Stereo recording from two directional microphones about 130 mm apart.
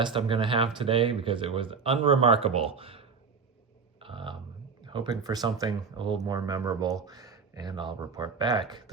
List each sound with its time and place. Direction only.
0.0 s speech: 40° right (ahead or behind)
4.0 s a sound: 40° right (ahead or behind)
4.8 s speech: 35° right (ahead or behind)